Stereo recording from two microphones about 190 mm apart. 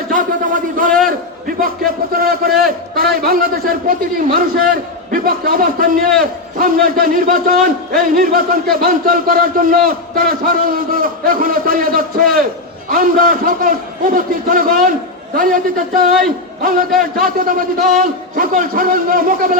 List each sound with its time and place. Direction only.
0.1 s a sound: 45° right (ahead or behind)
1.5 s music: 50° right (ahead or behind)
2.1 s a man's voice: 50° right (ahead or behind)
16.6 s a man's voice: 50° right (ahead or behind)